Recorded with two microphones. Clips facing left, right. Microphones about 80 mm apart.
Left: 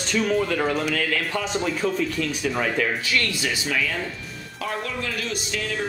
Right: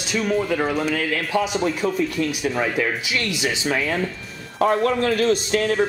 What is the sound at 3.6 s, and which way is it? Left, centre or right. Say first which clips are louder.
Speech: right 6 dB; right.